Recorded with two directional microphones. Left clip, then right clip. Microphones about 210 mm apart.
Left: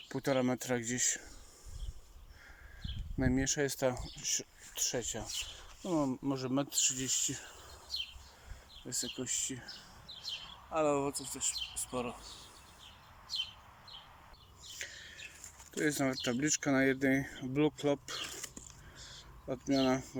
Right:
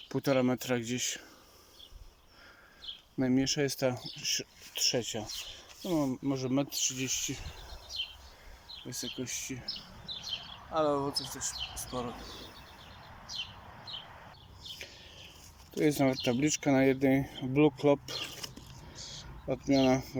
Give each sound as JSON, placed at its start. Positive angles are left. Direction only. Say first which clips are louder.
{"t": 0.1, "sound": "speech", "louder": "right 4 dB", "side_deg": -5}
{"t": 2.8, "sound": "speech", "louder": "right 3 dB", "side_deg": -5}
{"t": 8.9, "sound": "speech", "louder": "even", "side_deg": 0}
{"t": 10.7, "sound": "speech", "louder": "right 2 dB", "side_deg": 5}
{"t": 15.7, "sound": "speech", "louder": "right 5 dB", "side_deg": -5}